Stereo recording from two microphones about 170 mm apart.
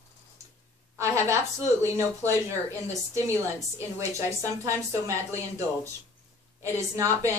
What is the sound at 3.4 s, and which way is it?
Speech, 20° right (ahead or behind).